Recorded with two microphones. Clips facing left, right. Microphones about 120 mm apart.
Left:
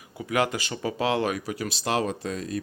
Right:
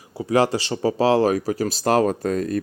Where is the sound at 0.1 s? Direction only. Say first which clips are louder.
Right 7 dB; 35° right (ahead or behind).